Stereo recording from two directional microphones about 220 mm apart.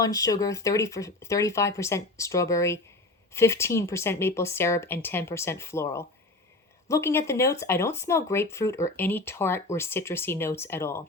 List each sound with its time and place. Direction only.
0.0 s speech: 15° left (ahead or behind)